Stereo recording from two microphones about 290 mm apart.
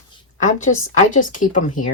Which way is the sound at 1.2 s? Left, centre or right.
Left.